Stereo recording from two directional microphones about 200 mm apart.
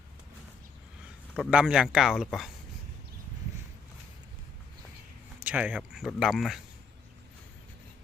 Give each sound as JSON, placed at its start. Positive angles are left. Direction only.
{"t": 1.4, "sound": "speech", "side_deg": -5}
{"t": 5.4, "sound": "speech", "side_deg": -10}